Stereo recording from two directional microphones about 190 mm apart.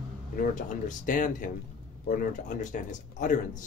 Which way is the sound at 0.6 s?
40° left (ahead or behind).